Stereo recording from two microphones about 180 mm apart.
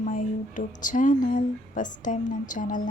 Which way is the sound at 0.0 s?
45° left (ahead or behind).